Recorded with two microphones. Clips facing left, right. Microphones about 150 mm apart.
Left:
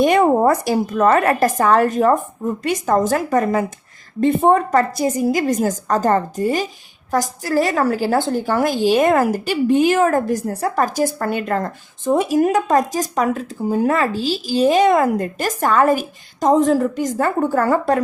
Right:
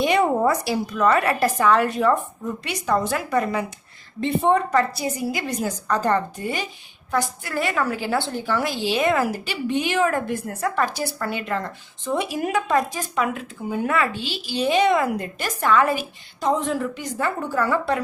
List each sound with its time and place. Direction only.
0.0 s a woman's voice: 45° left (ahead or behind)